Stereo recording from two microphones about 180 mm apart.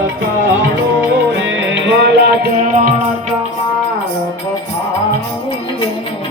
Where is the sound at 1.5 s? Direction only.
85° right; by 2.5 s 70° right (ahead or behind).